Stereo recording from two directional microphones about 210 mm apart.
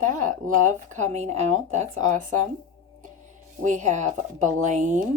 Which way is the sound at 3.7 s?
35° right (ahead or behind).